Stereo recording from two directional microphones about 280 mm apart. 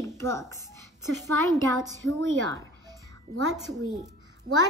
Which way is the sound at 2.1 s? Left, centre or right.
Right.